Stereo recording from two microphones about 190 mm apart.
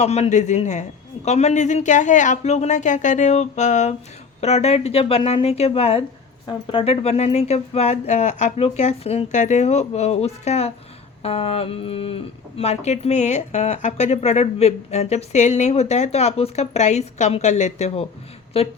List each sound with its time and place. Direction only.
0.0 s speech: 35° left (ahead or behind)